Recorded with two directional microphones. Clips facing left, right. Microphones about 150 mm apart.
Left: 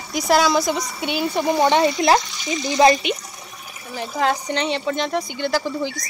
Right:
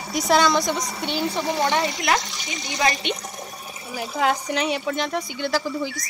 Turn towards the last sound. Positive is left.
turn(degrees=-5)  # may be behind; listen again after turning